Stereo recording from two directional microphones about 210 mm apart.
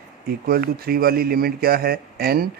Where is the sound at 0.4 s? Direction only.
45° right (ahead or behind).